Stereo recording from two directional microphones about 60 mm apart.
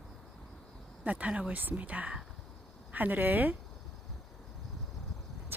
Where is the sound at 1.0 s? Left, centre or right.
Right.